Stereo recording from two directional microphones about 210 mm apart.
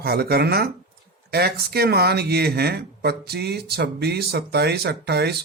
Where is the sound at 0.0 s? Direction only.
50° right (ahead or behind).